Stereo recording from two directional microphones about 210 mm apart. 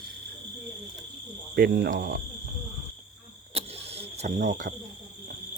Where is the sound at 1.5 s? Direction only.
50° right (ahead or behind).